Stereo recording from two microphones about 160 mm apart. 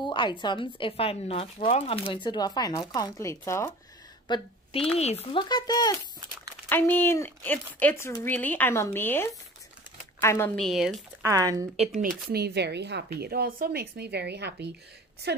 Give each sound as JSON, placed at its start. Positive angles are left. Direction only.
{"t": 0.0, "sound": "speech", "side_deg": 30}
{"t": 4.3, "sound": "speech", "side_deg": 35}
{"t": 5.4, "sound": "speech", "side_deg": 25}
{"t": 6.7, "sound": "speech", "side_deg": 15}
{"t": 10.5, "sound": "speech", "side_deg": 0}
{"t": 11.2, "sound": "speech", "side_deg": -20}
{"t": 12.3, "sound": "a woman's voice", "side_deg": -85}